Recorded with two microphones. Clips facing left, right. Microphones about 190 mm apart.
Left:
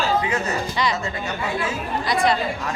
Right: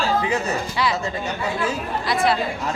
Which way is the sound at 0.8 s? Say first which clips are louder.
Right 1 dB; 5° right (ahead or behind).